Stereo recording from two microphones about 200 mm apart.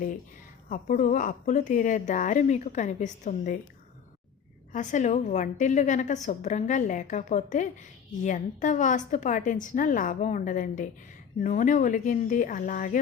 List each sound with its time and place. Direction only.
0.7 s a woman's voice: 40° left (ahead or behind)
4.7 s a woman's voice: 40° left (ahead or behind)